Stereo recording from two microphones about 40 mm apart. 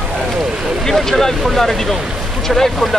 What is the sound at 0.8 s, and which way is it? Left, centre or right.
Speech, centre.